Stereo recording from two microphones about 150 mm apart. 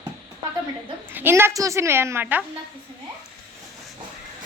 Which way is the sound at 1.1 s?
15° right (ahead or behind).